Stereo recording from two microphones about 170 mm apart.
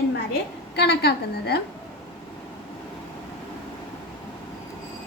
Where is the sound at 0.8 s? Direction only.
70° left (ahead or behind).